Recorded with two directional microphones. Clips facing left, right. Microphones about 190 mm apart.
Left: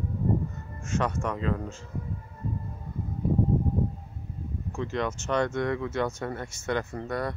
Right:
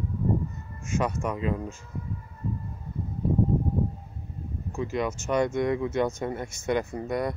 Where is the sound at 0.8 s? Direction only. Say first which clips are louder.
Right 1 dB; 10° right (ahead or behind).